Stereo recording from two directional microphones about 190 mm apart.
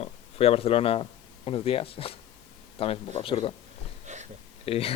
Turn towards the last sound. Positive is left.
turn(degrees=30)  # may be behind; listen again after turning